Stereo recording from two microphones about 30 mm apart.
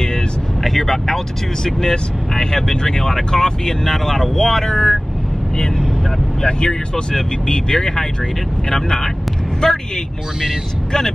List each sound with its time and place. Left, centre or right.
0.7 s speech: centre
3.9 s speech: centre
6.4 s speech: left